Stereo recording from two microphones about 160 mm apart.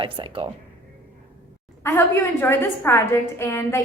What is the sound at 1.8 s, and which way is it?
A woman's voice, 15° left (ahead or behind).